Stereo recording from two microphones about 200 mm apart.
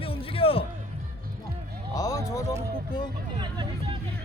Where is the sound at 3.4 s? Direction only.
20° right (ahead or behind).